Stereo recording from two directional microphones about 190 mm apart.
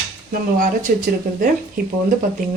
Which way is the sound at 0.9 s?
45° right (ahead or behind).